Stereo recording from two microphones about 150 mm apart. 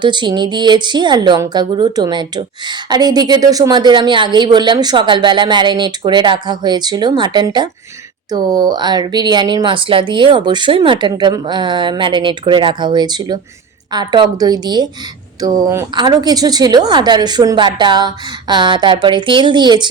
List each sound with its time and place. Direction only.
0.0 s a woman's voice: 30° right (ahead or behind)